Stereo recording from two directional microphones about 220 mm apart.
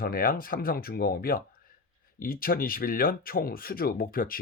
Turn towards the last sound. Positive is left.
turn(degrees=40)  # may be behind; listen again after turning